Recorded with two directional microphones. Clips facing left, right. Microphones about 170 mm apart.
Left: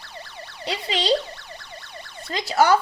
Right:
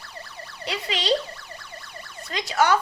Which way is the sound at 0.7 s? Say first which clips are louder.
Left 3 dB; 30° left (ahead or behind).